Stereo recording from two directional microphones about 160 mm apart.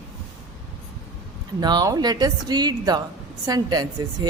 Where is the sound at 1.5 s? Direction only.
25° right (ahead or behind).